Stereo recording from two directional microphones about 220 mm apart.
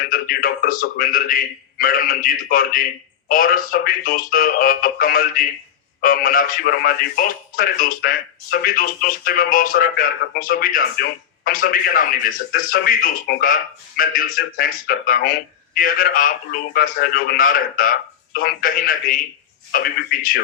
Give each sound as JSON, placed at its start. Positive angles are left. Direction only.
{"t": 0.0, "sound": "speech", "side_deg": 40}